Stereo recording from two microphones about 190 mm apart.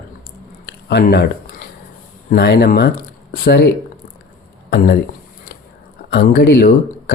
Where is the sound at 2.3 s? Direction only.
60° left (ahead or behind).